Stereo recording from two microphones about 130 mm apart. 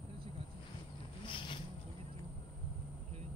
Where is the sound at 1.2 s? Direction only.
40° left (ahead or behind).